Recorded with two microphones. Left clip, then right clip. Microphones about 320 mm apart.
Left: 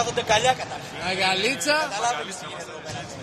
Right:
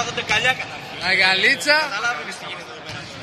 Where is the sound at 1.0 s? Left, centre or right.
Centre.